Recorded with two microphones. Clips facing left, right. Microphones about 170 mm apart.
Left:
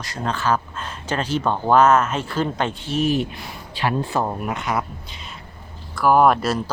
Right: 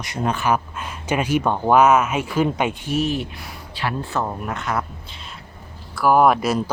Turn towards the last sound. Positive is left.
turn(degrees=-10)  # may be behind; listen again after turning